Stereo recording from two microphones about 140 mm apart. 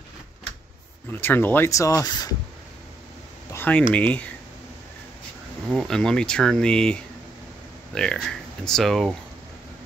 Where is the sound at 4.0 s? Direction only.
10° left (ahead or behind).